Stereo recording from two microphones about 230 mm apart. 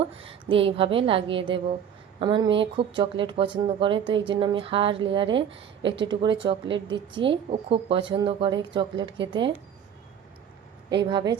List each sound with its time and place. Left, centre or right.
0.2 s speech: right
11.1 s speech: centre